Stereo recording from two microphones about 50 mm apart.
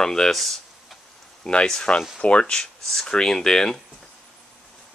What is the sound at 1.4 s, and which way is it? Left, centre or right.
Speech, centre.